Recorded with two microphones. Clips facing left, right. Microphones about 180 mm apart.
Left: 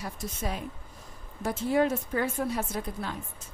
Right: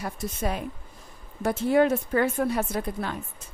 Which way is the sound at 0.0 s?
60° right (ahead or behind).